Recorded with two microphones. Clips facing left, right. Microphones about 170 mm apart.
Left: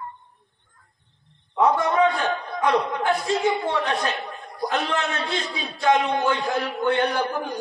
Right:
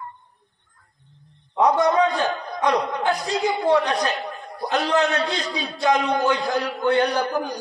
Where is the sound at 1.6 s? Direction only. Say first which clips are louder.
Right 2 dB; 40° right (ahead or behind).